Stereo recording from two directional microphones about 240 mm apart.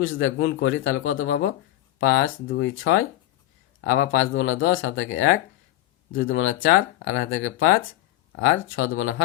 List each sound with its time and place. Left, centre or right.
0.0 s speech: left